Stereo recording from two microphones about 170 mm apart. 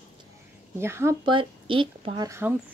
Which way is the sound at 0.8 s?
15° right (ahead or behind).